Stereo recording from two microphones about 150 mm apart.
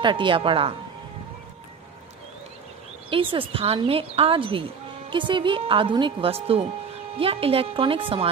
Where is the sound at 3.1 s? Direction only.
35° right (ahead or behind).